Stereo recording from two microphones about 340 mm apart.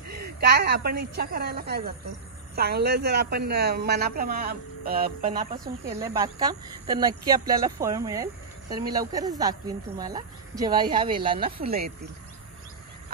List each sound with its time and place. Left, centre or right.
0.1 s a woman's voice: right
5.2 s speech: centre